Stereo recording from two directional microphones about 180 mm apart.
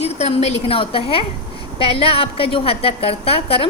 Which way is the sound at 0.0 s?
35° left (ahead or behind).